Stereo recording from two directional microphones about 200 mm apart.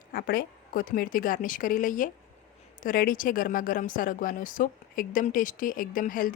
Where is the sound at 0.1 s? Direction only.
45° left (ahead or behind).